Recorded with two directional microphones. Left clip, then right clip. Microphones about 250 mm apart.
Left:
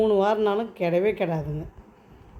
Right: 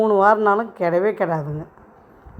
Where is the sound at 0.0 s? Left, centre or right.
Centre.